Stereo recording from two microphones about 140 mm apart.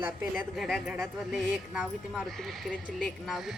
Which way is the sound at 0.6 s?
Centre (ahead or behind).